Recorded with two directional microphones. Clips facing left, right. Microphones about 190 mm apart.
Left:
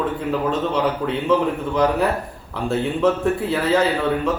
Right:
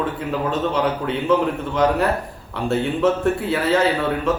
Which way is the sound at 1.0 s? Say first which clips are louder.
Even; centre (ahead or behind).